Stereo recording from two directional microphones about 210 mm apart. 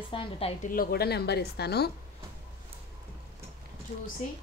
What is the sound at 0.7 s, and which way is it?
A woman's voice, 45° left (ahead or behind).